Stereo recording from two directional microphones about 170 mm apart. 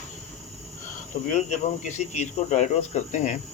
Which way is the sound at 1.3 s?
40° left (ahead or behind).